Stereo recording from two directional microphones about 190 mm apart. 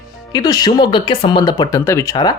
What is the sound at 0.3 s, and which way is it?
Speech, 20° left (ahead or behind).